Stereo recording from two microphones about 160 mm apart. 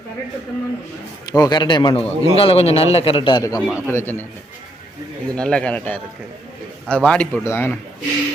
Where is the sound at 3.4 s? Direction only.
20° left (ahead or behind).